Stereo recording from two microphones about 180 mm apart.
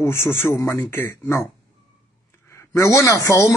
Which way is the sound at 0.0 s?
15° left (ahead or behind).